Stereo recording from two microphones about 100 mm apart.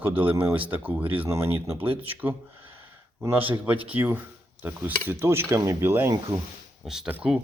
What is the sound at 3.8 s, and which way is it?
Cutlery, 20° right (ahead or behind).